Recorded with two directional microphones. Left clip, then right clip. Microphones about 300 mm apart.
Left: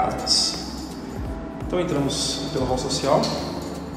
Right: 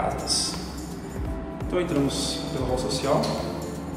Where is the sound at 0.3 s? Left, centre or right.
Centre.